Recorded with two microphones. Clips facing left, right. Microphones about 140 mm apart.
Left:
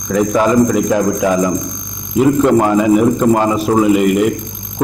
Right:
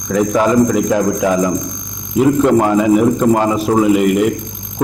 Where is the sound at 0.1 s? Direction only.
15° left (ahead or behind).